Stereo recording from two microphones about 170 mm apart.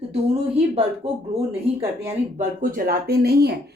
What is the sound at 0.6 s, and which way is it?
Speech, 35° right (ahead or behind).